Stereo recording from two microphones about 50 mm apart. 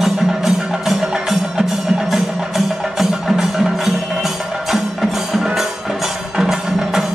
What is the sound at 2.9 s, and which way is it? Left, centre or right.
Music, centre.